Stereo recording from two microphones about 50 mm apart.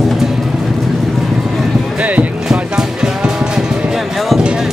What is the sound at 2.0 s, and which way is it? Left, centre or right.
Music, right.